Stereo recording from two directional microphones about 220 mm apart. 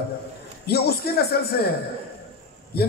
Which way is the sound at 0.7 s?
45° left (ahead or behind).